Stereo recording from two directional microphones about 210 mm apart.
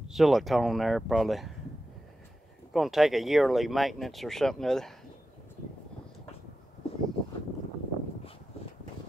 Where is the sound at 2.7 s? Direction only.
Centre (ahead or behind).